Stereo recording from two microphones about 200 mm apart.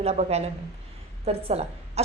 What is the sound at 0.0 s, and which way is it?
A woman's voice, 30° right (ahead or behind).